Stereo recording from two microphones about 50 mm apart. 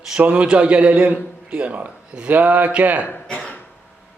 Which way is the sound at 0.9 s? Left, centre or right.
Right.